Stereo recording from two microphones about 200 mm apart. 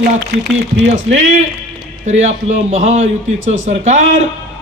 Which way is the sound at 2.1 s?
35° right (ahead or behind).